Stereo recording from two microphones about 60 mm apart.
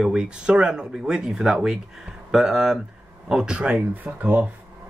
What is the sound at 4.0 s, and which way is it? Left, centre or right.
Speech, right.